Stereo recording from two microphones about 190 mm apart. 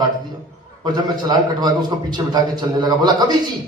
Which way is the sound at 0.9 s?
20° right (ahead or behind).